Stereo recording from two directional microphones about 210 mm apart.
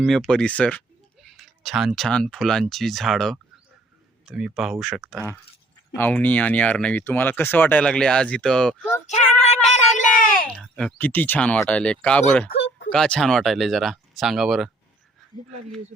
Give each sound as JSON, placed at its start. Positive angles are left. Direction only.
{"t": 0.0, "sound": "speech", "side_deg": 0}
{"t": 9.0, "sound": "child singing", "side_deg": 30}
{"t": 10.5, "sound": "speech", "side_deg": 0}
{"t": 12.5, "sound": "a sound", "side_deg": 60}
{"t": 12.9, "sound": "speech", "side_deg": 5}